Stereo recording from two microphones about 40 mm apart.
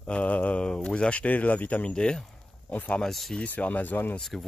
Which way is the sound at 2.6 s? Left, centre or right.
Left.